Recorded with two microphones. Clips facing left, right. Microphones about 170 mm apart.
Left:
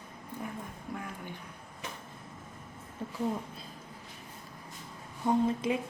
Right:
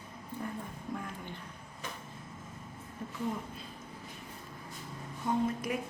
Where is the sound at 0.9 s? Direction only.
10° left (ahead or behind).